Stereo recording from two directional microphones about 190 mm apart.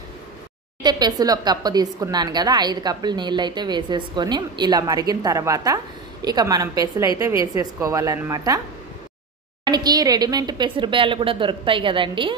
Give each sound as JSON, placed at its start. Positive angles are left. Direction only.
{"t": 0.8, "sound": "a woman's voice", "side_deg": -20}
{"t": 9.7, "sound": "speech", "side_deg": -20}